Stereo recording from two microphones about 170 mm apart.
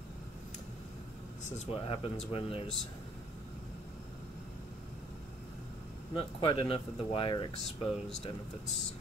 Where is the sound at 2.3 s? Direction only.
35° left (ahead or behind).